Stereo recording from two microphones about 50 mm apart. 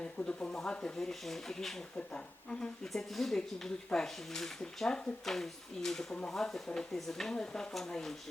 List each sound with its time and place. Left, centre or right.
0.0 s speech: left; by 1.8 s centre
2.0 s speech: left
2.8 s speech: centre